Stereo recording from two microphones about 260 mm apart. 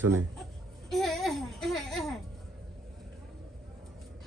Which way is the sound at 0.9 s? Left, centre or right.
Centre.